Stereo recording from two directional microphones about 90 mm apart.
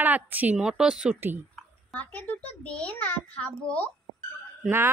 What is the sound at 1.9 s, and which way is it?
A child's voice, 20° left (ahead or behind).